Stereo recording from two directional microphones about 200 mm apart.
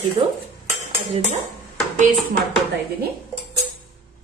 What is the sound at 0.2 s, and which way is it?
Dishes, 30° right (ahead or behind).